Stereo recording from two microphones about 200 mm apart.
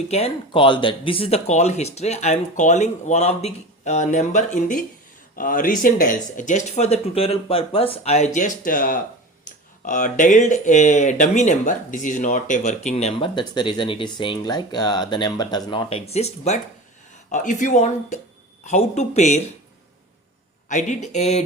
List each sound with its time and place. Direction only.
0.1 s speech: 30° left (ahead or behind)
20.7 s speech: 35° left (ahead or behind)